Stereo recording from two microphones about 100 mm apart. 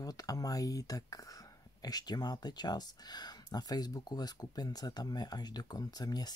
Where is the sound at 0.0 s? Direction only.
40° left (ahead or behind).